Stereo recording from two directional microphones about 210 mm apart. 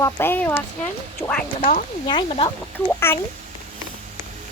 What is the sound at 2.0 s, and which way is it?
Speech, 25° left (ahead or behind).